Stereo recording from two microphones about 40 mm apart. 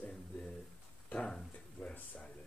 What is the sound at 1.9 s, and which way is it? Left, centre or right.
Speech, left.